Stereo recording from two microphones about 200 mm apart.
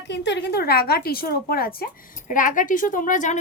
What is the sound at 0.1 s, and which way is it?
A woman's voice, 60° left (ahead or behind).